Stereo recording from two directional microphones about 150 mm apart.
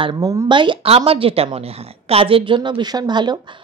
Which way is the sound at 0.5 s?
35° right (ahead or behind).